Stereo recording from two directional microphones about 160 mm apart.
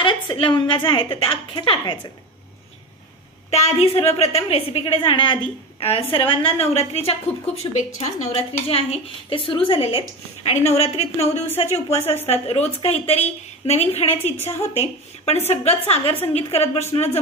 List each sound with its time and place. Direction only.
0.0 s a woman's voice: 30° left (ahead or behind)
3.4 s a woman's voice: 40° left (ahead or behind)